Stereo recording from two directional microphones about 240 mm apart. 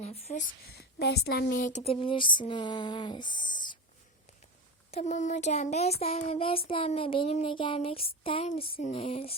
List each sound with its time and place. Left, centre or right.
0.0 s speech: left
0.7 s speech: left; by 3.8 s centre
4.9 s speech: left